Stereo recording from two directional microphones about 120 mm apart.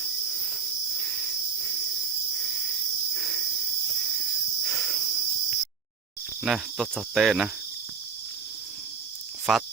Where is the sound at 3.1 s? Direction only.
5° left (ahead or behind).